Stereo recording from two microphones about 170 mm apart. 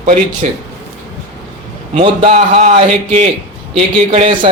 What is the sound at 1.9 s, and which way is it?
Speech, 35° right (ahead or behind).